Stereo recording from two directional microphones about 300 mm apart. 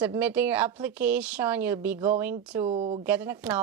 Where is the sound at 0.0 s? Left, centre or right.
Centre.